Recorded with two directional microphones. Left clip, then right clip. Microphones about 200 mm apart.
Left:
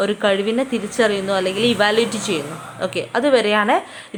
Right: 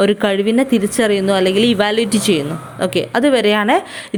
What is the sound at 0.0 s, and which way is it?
A woman's voice, 30° right (ahead or behind).